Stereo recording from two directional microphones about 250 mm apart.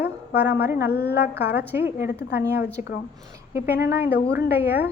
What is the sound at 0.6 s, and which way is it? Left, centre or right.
Speech, centre.